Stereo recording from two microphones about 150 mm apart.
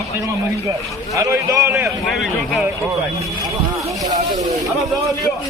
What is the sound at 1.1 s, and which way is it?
Speech, 20° right (ahead or behind).